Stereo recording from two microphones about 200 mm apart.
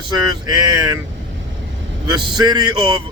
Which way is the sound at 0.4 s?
20° right (ahead or behind).